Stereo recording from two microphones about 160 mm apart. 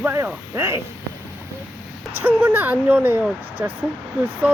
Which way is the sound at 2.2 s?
10° right (ahead or behind).